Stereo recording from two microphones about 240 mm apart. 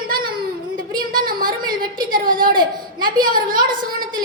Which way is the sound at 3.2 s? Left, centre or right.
Right.